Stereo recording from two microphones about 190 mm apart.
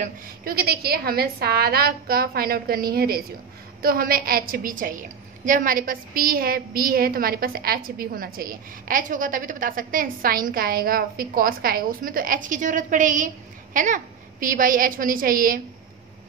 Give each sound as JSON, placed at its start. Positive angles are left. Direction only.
{"t": 0.0, "sound": "a woman's voice", "side_deg": -50}